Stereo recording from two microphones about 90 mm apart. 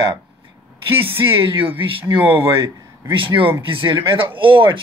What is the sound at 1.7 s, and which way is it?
Speech, 20° right (ahead or behind).